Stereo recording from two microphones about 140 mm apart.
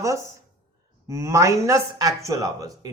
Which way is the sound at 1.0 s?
20° right (ahead or behind).